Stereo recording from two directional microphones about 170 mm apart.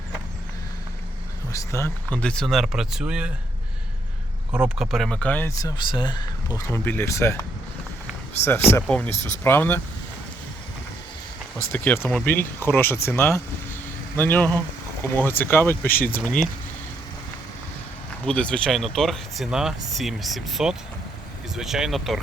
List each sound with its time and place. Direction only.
1.5 s speech: 15° left (ahead or behind); by 3.3 s 5° right (ahead or behind)
4.5 s speech: 5° right (ahead or behind); by 6.2 s 25° left (ahead or behind)
6.6 s speech: 15° left (ahead or behind)
8.9 s speech: 10° left (ahead or behind)
11.7 s speech: 15° left (ahead or behind)
18.3 s speech: 5° left (ahead or behind)